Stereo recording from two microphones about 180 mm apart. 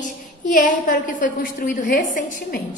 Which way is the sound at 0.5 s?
50° left (ahead or behind).